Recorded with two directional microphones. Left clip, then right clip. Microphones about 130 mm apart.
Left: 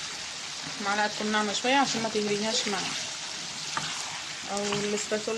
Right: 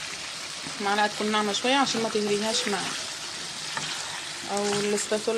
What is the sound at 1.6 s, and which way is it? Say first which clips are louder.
Speech: left 1 dB; 25° right (ahead or behind).